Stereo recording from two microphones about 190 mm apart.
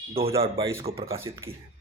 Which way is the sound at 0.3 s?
30° right (ahead or behind).